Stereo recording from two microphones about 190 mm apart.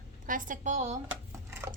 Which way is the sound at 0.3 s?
45° right (ahead or behind).